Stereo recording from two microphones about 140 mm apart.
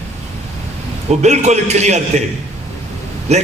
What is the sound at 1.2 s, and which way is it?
A man's voice, 55° right (ahead or behind).